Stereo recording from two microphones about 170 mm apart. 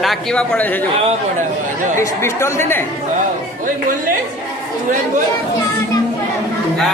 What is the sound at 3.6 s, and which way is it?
Speech, 55° right (ahead or behind).